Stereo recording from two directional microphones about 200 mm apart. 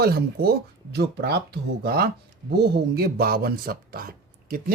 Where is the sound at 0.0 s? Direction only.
50° right (ahead or behind).